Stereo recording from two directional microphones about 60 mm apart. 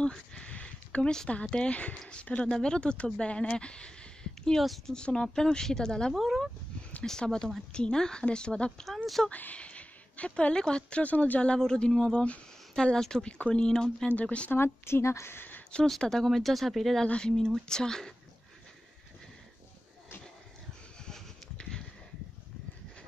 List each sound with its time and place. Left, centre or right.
0.1 s a sound: centre
1.5 s speech: centre
4.6 s speech: centre
4.9 s speech: centre
6.1 s speech: centre
7.1 s speech: centre
8.8 s speech: centre
9.3 s a woman's voice: left
11.5 s speech: centre
14.5 s a woman's voice: left
15.7 s speech: centre
21.0 s a sound: centre